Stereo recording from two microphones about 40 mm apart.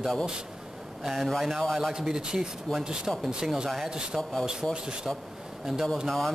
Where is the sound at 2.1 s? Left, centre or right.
Centre.